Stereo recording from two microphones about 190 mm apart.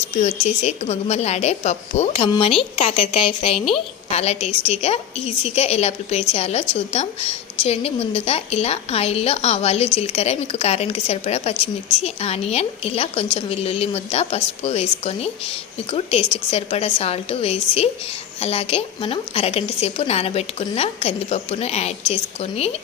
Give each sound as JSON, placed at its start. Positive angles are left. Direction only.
{"t": 0.1, "sound": "a woman's voice", "side_deg": 35}